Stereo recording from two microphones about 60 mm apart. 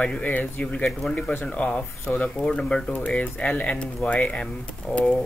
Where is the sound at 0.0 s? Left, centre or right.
Left.